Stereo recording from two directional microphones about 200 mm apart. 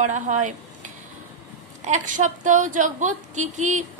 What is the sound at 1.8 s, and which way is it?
A woman's voice, 40° right (ahead or behind).